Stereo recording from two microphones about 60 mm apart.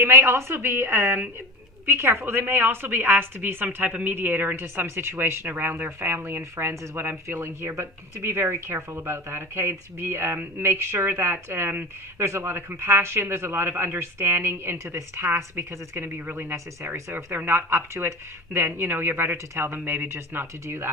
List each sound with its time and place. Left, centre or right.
0.0 s a man's voice: right
3.8 s a woman's voice: right
4.1 s speech: right
5.5 s a man's voice: right
12.2 s a man's voice: right